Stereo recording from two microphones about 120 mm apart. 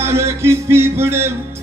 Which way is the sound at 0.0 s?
20° right (ahead or behind).